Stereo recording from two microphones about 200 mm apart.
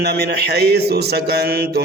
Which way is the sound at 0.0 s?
55° right (ahead or behind).